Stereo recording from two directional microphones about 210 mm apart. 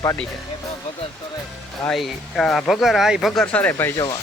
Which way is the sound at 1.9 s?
Centre (ahead or behind).